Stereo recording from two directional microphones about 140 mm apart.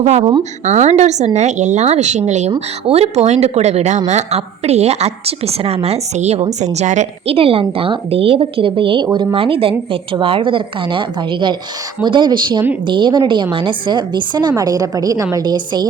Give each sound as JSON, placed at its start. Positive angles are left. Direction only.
{"t": 0.0, "sound": "a woman's voice", "side_deg": -55}
{"t": 2.5, "sound": "a woman's voice", "side_deg": -45}
{"t": 7.3, "sound": "a woman's voice", "side_deg": -40}